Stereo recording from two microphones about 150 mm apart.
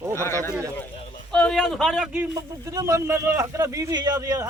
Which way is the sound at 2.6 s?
20° right (ahead or behind).